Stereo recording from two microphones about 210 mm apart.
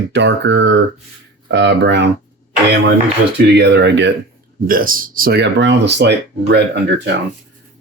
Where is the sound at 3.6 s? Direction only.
55° right (ahead or behind).